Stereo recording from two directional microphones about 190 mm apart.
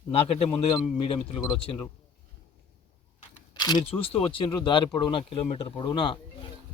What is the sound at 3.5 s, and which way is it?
Speech, 20° left (ahead or behind).